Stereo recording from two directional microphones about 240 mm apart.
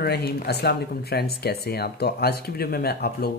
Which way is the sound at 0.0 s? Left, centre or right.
Left.